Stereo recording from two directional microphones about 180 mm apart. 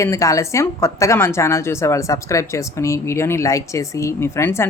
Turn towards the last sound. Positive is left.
turn(degrees=15)  # may be behind; listen again after turning